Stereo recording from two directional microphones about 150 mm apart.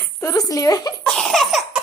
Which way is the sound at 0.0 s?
20° left (ahead or behind).